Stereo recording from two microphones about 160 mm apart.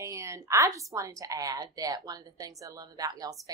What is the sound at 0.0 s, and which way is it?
A woman's voice, 20° right (ahead or behind).